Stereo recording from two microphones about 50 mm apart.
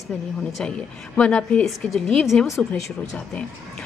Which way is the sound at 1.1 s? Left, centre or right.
Left.